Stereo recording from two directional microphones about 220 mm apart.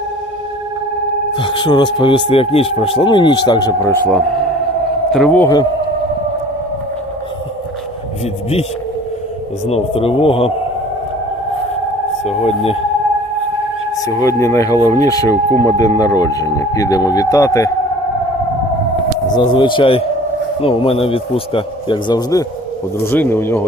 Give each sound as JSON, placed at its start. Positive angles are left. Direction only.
{"t": 1.4, "sound": "a man's voice", "side_deg": 20}
{"t": 5.1, "sound": "speech", "side_deg": 5}
{"t": 9.6, "sound": "a man's voice", "side_deg": 25}
{"t": 12.2, "sound": "a man's voice", "side_deg": 30}
{"t": 13.9, "sound": "speech", "side_deg": 15}
{"t": 19.4, "sound": "a man's voice", "side_deg": 20}